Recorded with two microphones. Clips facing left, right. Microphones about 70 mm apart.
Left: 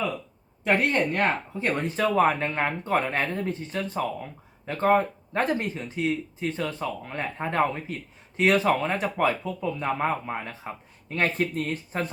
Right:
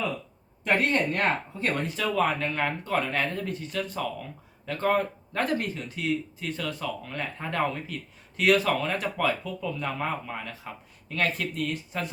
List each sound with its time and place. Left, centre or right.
0.6 s speech: centre
1.8 s speech: left